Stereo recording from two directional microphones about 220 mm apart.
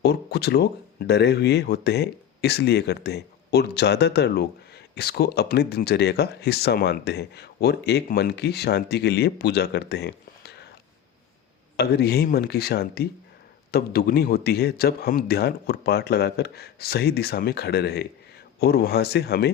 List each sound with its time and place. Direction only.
0.0 s speech: 50° left (ahead or behind)
11.8 s speech: 45° left (ahead or behind)